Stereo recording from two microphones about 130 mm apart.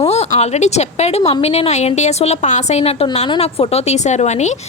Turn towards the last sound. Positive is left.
turn(degrees=60)  # may be behind; listen again after turning